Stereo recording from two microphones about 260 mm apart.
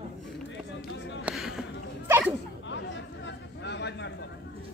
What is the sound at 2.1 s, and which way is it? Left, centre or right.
Chatter, centre.